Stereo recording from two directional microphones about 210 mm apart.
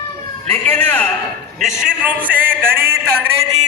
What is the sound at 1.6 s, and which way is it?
A man's voice, 5° right (ahead or behind).